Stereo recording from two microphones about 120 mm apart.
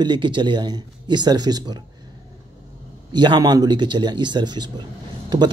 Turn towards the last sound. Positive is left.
turn(degrees=-35)  # may be behind; listen again after turning